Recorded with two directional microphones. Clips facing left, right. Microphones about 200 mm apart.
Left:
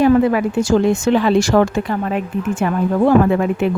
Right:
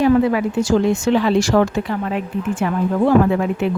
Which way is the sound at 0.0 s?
50° left (ahead or behind).